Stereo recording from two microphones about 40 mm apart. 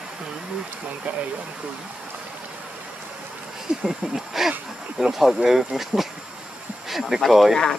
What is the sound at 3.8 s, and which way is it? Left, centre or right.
Speech, centre.